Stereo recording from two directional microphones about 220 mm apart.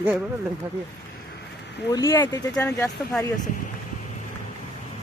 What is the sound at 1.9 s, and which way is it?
Speech, 15° left (ahead or behind).